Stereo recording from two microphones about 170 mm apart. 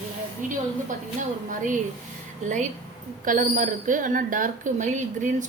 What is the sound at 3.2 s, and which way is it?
A woman's voice, 50° right (ahead or behind).